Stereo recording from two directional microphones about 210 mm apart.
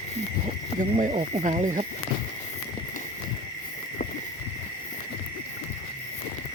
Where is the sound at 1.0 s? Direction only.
35° right (ahead or behind).